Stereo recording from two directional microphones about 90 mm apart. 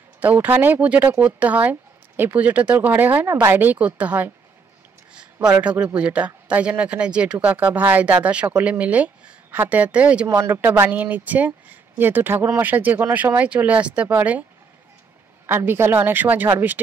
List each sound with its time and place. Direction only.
0.2 s speech: 20° right (ahead or behind)
10.2 s speech: 35° right (ahead or behind)
10.5 s speech: 20° right (ahead or behind)
15.4 s speech: 25° right (ahead or behind)